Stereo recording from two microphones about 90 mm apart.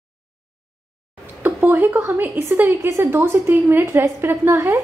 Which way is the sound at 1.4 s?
25° right (ahead or behind).